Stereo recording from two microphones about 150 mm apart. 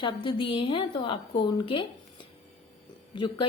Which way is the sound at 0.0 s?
35° left (ahead or behind).